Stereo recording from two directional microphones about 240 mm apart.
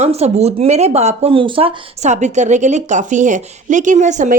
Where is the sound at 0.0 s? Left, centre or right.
Right.